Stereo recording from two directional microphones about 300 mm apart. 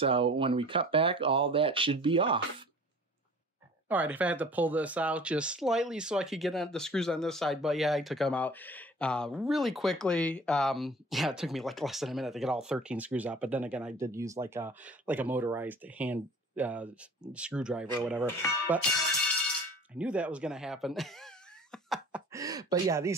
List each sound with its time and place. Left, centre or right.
0.0 s speech: centre
3.9 s speech: centre
20.0 s speech: centre
21.7 s a sound: centre
22.3 s speech: centre